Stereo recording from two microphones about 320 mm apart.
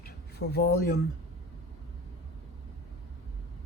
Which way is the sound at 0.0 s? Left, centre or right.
Left.